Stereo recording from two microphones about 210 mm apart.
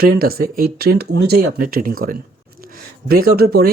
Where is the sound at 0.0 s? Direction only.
45° right (ahead or behind).